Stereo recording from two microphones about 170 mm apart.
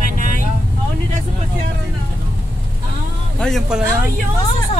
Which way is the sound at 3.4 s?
Centre (ahead or behind).